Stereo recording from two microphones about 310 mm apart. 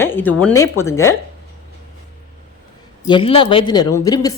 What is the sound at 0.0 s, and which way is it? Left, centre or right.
Speech, centre.